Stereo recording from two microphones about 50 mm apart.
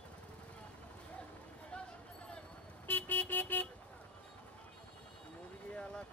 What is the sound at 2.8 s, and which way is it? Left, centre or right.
Vehicle, left.